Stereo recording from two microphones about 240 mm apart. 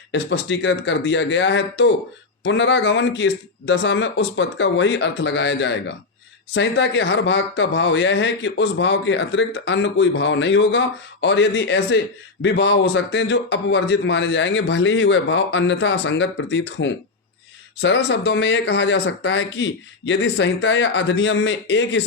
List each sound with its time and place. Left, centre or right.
0.1 s a man's voice: left